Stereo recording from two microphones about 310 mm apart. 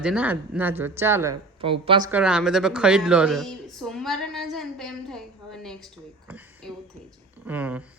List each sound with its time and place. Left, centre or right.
0.0 s speech: centre